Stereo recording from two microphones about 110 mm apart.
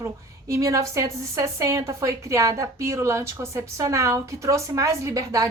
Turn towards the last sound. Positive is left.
turn(degrees=-30)  # may be behind; listen again after turning